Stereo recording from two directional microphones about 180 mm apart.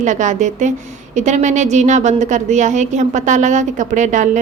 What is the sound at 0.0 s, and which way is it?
A woman's voice, 45° right (ahead or behind).